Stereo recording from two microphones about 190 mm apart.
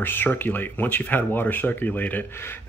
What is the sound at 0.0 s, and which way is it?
Speech, 10° left (ahead or behind).